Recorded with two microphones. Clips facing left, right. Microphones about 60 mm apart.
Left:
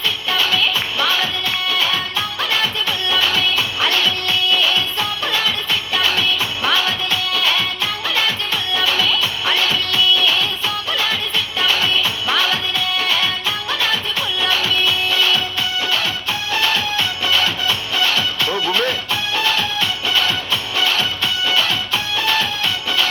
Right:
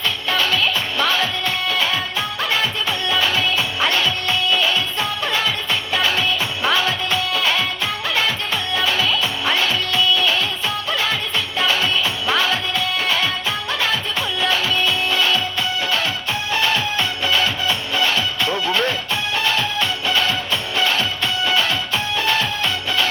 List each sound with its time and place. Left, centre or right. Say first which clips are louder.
0.3 s music: even; right
8.7 s music: left 1 dB; right
16.5 s music: even; right